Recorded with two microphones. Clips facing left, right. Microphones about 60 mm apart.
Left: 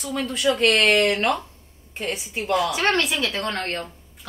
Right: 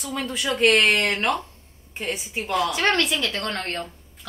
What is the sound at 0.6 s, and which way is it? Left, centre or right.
Speech, centre.